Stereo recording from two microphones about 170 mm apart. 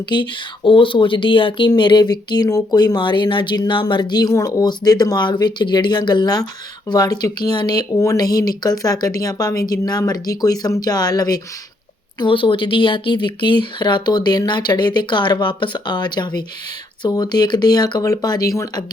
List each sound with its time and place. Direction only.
0.1 s speech: 30° left (ahead or behind)